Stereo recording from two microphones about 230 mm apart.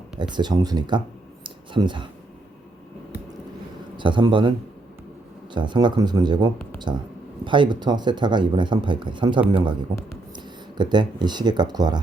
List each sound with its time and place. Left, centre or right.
0.2 s speech: centre
1.5 s a sound: right
3.9 s a man's voice: right
5.5 s speech: centre